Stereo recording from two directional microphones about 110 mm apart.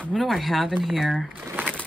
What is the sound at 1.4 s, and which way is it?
Shuffling cards, 15° right (ahead or behind).